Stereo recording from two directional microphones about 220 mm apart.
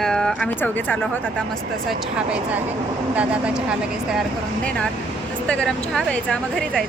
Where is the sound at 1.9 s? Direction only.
5° right (ahead or behind).